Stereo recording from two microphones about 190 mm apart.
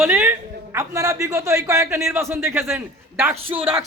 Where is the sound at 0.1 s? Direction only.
10° right (ahead or behind).